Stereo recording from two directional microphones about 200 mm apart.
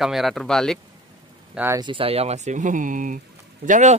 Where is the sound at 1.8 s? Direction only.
25° right (ahead or behind).